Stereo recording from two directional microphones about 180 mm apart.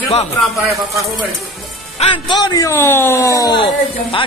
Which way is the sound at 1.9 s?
25° left (ahead or behind).